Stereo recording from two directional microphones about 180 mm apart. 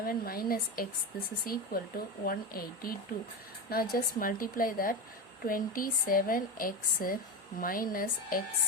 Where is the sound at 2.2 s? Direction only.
55° left (ahead or behind).